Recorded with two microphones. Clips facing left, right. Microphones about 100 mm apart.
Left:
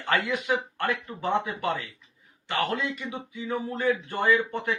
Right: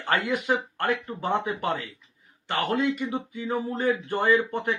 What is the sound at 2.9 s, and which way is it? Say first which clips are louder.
Speech: right 6 dB; 15° right (ahead or behind).